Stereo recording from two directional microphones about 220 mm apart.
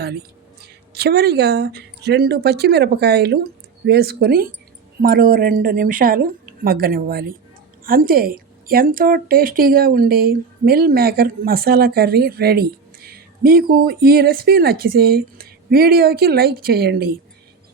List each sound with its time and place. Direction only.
0.9 s a woman's voice: 45° right (ahead or behind)